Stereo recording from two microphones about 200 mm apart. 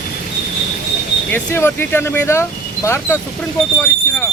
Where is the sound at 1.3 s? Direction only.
10° left (ahead or behind).